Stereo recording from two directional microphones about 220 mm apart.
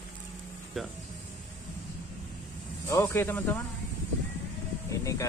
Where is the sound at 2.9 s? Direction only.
10° left (ahead or behind).